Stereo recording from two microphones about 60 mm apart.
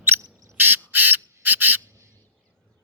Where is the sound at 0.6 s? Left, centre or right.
Right.